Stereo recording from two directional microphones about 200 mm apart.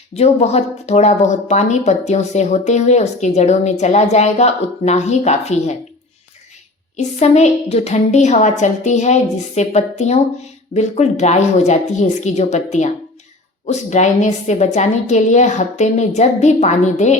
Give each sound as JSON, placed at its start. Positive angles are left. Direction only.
{"t": 0.1, "sound": "a woman's voice", "side_deg": 30}
{"t": 6.9, "sound": "a woman's voice", "side_deg": 35}